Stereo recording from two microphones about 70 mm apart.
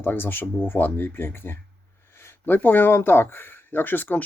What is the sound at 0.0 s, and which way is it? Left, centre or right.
Speech, left.